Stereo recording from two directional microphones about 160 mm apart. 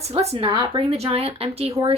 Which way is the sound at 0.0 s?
40° right (ahead or behind).